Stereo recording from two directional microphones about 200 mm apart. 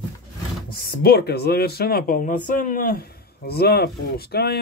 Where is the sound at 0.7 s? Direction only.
50° left (ahead or behind).